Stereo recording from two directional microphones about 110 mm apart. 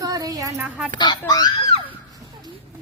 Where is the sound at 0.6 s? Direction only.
10° right (ahead or behind).